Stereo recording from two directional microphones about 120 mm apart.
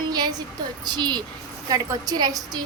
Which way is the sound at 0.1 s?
35° right (ahead or behind).